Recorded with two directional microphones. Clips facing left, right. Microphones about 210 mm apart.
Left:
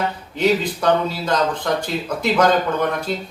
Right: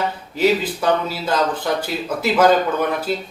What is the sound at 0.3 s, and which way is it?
Speech, 5° right (ahead or behind).